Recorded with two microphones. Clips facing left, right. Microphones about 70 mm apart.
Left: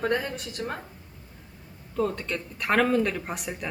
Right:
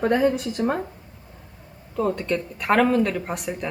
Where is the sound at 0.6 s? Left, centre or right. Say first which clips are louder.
Right 9 dB; centre.